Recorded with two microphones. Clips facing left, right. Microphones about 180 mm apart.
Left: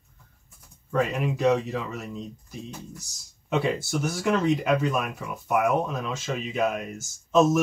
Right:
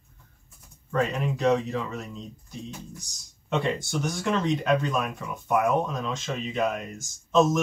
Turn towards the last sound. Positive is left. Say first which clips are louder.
# left 1 dB
turn(degrees=5)  # may be behind; listen again after turning